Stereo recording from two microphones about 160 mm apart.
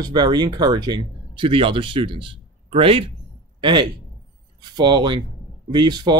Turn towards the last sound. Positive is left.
turn(degrees=-25)  # may be behind; listen again after turning